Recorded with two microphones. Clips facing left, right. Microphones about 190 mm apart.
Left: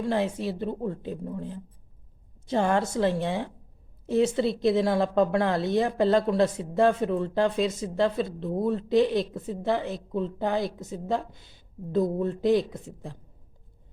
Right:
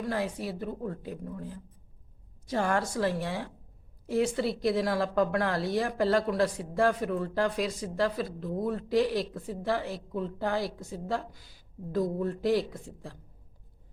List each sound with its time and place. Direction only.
0.0 s a woman's voice: 25° left (ahead or behind)